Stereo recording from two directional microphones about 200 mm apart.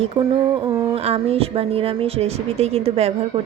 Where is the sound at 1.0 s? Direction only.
30° right (ahead or behind).